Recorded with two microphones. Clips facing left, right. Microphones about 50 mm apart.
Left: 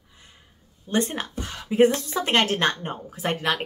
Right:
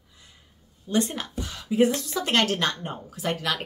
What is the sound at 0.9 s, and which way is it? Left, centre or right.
Speech, left.